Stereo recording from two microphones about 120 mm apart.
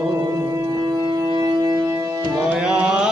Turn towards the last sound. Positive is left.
turn(degrees=-5)  # may be behind; listen again after turning